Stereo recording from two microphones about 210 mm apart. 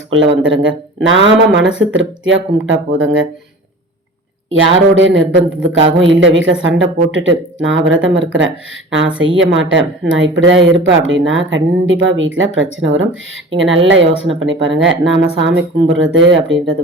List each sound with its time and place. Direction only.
0.1 s speech: 65° right (ahead or behind)
4.4 s speech: 65° right (ahead or behind)